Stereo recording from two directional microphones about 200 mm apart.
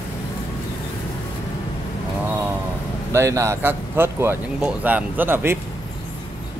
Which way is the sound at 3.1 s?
15° right (ahead or behind).